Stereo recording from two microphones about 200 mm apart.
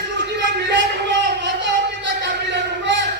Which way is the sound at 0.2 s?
60° right (ahead or behind).